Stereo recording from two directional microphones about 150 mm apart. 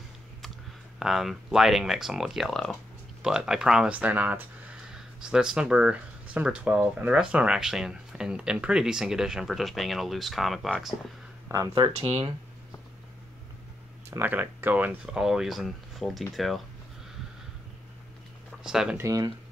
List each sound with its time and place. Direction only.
0.9 s speech: centre (ahead or behind)
11.5 s speech: 25° right (ahead or behind)
11.9 s speech: 40° right (ahead or behind)
14.1 s speech: 15° right (ahead or behind)
18.6 s speech: 5° right (ahead or behind)
18.9 s speech: 20° right (ahead or behind)